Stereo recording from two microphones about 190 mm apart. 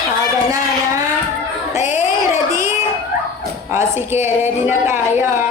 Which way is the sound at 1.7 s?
40° left (ahead or behind).